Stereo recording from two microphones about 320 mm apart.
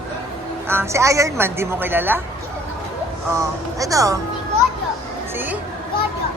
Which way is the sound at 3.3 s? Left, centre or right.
Centre.